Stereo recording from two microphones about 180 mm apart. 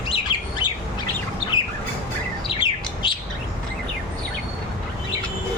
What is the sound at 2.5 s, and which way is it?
Bird, 25° left (ahead or behind).